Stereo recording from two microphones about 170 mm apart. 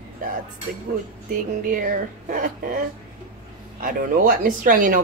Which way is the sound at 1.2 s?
50° right (ahead or behind).